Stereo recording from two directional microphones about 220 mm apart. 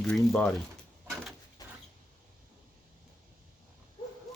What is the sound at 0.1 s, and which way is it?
Speech, 5° left (ahead or behind).